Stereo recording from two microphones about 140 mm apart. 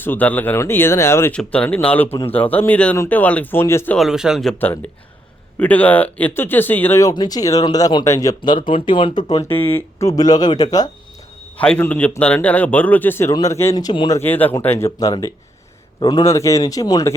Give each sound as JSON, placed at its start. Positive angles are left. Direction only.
{"t": 0.0, "sound": "speech", "side_deg": 15}
{"t": 1.3, "sound": "speech", "side_deg": 10}
{"t": 3.9, "sound": "speech", "side_deg": 0}
{"t": 5.5, "sound": "speech", "side_deg": 10}
{"t": 7.1, "sound": "speech", "side_deg": 30}
{"t": 8.6, "sound": "speech", "side_deg": 35}
{"t": 9.5, "sound": "speech", "side_deg": 15}
{"t": 11.5, "sound": "speech", "side_deg": 10}
{"t": 14.2, "sound": "speech", "side_deg": 15}